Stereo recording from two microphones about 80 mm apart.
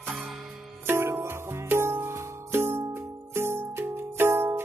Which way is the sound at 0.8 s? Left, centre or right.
Right.